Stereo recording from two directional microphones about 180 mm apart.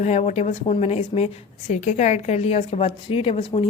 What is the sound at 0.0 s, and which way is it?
A woman's voice, 40° left (ahead or behind).